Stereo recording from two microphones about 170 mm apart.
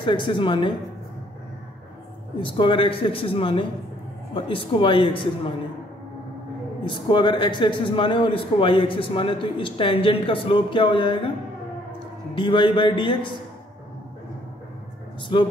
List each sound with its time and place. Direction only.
0.0 s speech: 30° left (ahead or behind)
2.4 s a man's voice: 30° left (ahead or behind)
6.8 s a man's voice: 30° left (ahead or behind)
12.4 s speech: 30° left (ahead or behind)
15.3 s speech: 30° left (ahead or behind)